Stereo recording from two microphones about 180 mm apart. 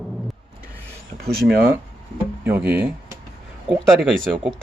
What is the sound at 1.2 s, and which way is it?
Speech, 55° right (ahead or behind).